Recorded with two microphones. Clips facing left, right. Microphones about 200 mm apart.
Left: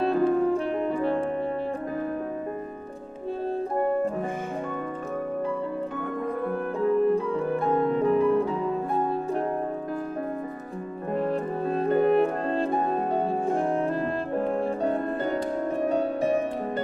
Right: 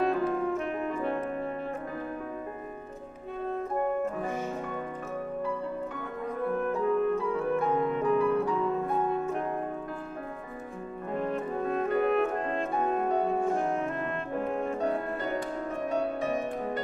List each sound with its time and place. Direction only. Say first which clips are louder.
0.0 s saxophone: left 5 dB; 30° left (ahead or behind)
3.4 s music: left 3 dB; 30° left (ahead or behind)
6.5 s music: left 2 dB; 35° left (ahead or behind)
11.1 s music: left 4 dB; 30° left (ahead or behind)